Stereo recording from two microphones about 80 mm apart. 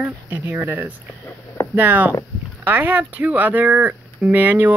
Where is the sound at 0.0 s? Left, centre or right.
Right.